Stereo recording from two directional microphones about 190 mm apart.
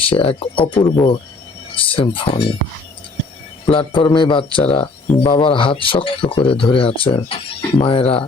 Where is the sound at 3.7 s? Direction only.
25° left (ahead or behind).